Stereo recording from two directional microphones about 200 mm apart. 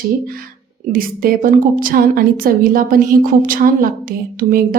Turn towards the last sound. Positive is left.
turn(degrees=-45)  # may be behind; listen again after turning